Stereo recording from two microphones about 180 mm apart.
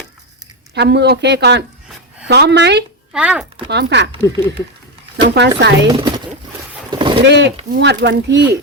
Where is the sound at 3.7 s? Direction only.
70° right (ahead or behind).